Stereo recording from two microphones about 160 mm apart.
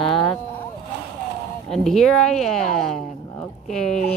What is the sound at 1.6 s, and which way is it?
Speech, 5° left (ahead or behind).